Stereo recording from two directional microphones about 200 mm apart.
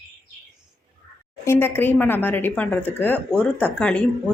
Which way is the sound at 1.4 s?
10° left (ahead or behind).